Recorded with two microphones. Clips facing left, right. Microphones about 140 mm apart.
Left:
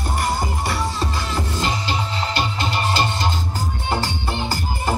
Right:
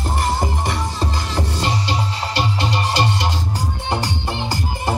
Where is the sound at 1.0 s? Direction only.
15° right (ahead or behind).